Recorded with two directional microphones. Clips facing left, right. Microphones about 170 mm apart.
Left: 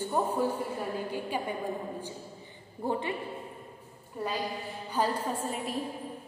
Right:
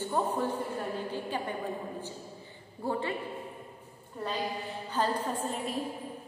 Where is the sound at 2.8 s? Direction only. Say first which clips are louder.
Left 1 dB; 20° left (ahead or behind).